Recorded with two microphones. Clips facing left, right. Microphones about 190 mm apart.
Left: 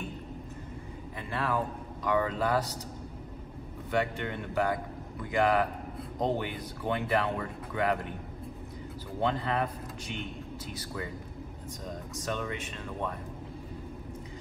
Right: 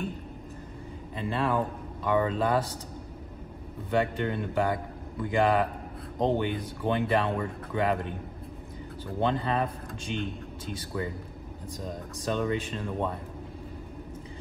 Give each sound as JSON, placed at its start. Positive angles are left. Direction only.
{"t": 1.1, "sound": "speech", "side_deg": -20}
{"t": 3.9, "sound": "speech", "side_deg": -30}
{"t": 9.2, "sound": "speech", "side_deg": -20}
{"t": 12.3, "sound": "speech", "side_deg": -30}